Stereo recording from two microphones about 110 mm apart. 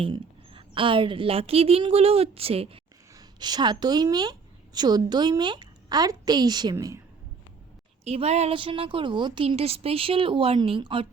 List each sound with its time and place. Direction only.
0.0 s a woman's voice: 55° right (ahead or behind)
3.2 s a woman's voice: 40° right (ahead or behind)
8.0 s a woman's voice: 70° right (ahead or behind)
8.5 s speech: 50° right (ahead or behind)